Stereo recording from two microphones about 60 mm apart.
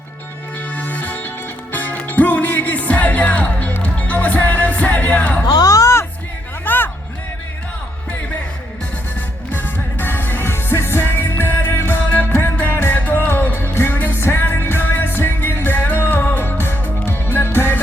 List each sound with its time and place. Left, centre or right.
0.8 s music: left
5.6 s music: left
6.7 s music: left
9.5 s music: left